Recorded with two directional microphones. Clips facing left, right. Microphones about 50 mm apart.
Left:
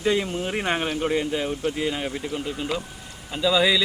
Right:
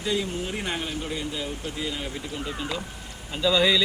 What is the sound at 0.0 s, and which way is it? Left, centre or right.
Speech, left.